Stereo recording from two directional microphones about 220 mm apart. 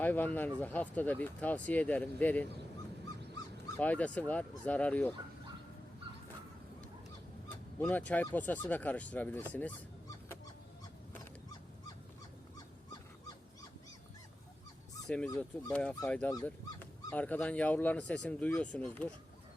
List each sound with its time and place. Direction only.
0.0 s speech: 10° left (ahead or behind)
3.8 s speech: 5° left (ahead or behind)
7.8 s speech: 5° left (ahead or behind)
12.5 s dog: 15° left (ahead or behind)
15.0 s speech: 5° left (ahead or behind)